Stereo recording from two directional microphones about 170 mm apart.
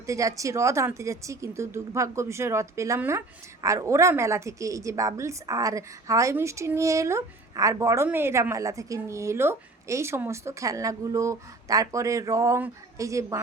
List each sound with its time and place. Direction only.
0.0 s speech: 20° right (ahead or behind)